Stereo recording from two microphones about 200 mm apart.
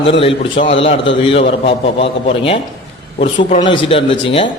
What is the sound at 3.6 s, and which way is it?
Speech, 25° left (ahead or behind).